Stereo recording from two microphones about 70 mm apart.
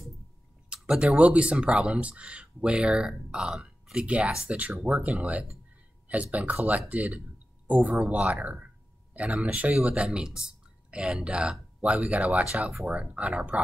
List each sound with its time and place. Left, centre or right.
0.9 s speech: centre